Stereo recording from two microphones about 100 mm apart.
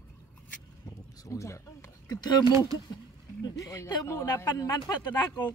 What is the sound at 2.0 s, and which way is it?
Speech, 40° left (ahead or behind).